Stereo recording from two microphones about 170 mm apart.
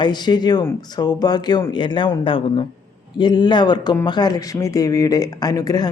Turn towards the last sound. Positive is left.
turn(degrees=20)  # may be behind; listen again after turning